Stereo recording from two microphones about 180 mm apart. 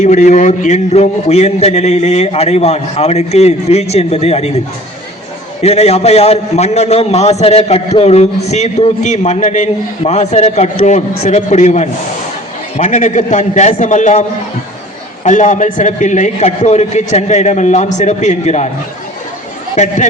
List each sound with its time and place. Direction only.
0.0 s a man's voice: 40° left (ahead or behind)
5.6 s a man's voice: 35° left (ahead or behind)
19.7 s a man's voice: 40° left (ahead or behind)